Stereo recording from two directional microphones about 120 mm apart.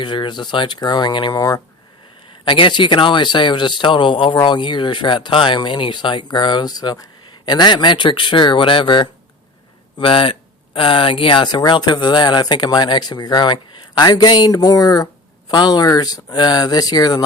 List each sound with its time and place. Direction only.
0.0 s speech: 40° left (ahead or behind)
2.4 s speech: 40° left (ahead or behind)